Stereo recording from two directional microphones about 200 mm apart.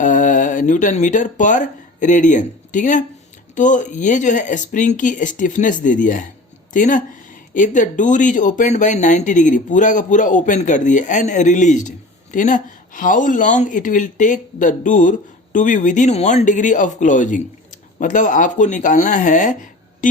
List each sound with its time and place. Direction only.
0.0 s speech: 40° left (ahead or behind)